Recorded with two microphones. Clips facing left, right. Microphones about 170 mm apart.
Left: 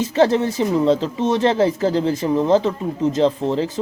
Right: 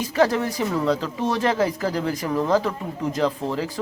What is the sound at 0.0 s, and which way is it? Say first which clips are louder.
Speech: left 4 dB; 25° left (ahead or behind).